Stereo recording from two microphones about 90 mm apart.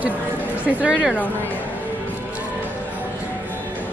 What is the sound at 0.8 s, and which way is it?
Speech, 10° right (ahead or behind).